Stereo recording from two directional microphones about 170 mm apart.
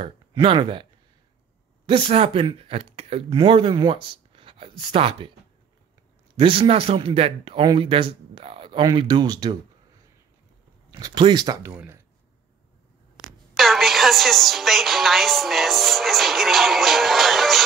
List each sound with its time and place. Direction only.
0.0 s speech: 30° right (ahead or behind)
1.9 s speech: 30° right (ahead or behind)
6.3 s speech: 30° right (ahead or behind)
10.9 s speech: 25° right (ahead or behind)
13.6 s a woman's voice: centre (ahead or behind)